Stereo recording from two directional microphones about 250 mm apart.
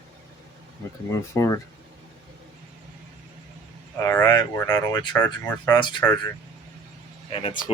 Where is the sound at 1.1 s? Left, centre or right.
Centre.